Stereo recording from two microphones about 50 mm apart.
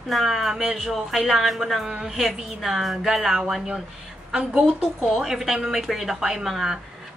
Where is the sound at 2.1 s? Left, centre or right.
Centre.